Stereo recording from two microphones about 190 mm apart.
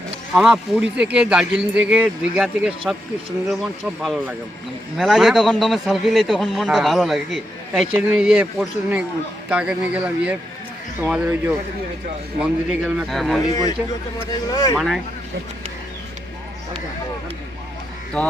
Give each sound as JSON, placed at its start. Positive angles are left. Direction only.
{"t": 0.3, "sound": "a man's voice", "side_deg": 0}
{"t": 4.0, "sound": "a man's voice", "side_deg": 0}
{"t": 13.5, "sound": "speech", "side_deg": 20}
{"t": 14.8, "sound": "a man's voice", "side_deg": 0}
{"t": 18.2, "sound": "a man's voice", "side_deg": 5}